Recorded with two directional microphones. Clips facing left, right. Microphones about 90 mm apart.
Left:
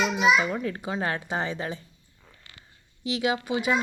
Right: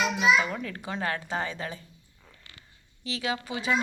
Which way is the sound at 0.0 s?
20° left (ahead or behind).